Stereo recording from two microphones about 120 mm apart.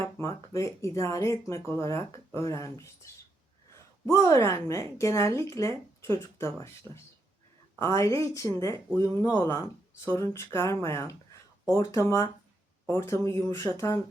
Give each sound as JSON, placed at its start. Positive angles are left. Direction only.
{"t": 0.0, "sound": "speech", "side_deg": 20}
{"t": 4.1, "sound": "speech", "side_deg": 25}
{"t": 7.8, "sound": "speech", "side_deg": 25}